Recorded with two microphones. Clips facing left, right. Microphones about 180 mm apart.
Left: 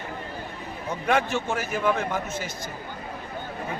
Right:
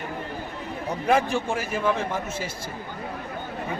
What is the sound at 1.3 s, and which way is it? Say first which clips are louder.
A man's voice: right 1 dB; 30° right (ahead or behind).